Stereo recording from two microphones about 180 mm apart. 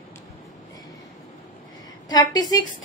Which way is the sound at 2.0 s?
20° left (ahead or behind).